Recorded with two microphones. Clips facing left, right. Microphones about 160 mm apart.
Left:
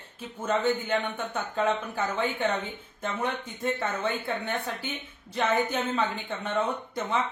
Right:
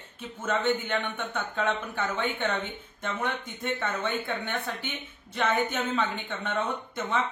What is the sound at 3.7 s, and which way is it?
Speech, 35° left (ahead or behind).